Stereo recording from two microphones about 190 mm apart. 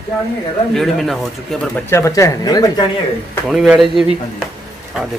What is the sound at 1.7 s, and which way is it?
Speech, 10° left (ahead or behind).